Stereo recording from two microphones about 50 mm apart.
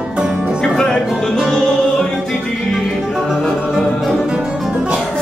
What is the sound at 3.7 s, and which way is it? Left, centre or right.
Music, centre.